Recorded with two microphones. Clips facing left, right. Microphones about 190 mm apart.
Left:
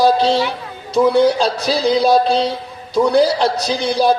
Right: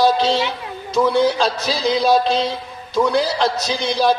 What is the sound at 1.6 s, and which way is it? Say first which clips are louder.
A man's voice: left 3 dB; 35° left (ahead or behind).